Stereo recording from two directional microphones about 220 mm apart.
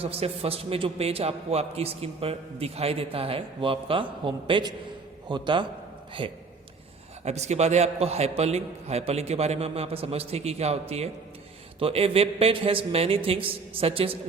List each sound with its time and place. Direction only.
0.0 s a man's voice: 25° right (ahead or behind)